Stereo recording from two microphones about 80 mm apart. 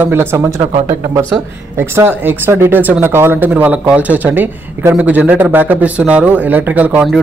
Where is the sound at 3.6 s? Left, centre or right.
Centre.